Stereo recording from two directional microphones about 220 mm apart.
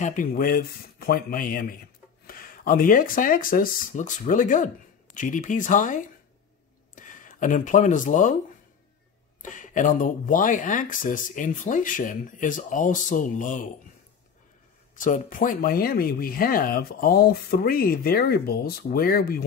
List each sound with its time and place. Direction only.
0.0 s speech: 40° left (ahead or behind)
7.0 s speech: 35° left (ahead or behind)
9.4 s speech: 35° left (ahead or behind)
15.0 s speech: 35° left (ahead or behind)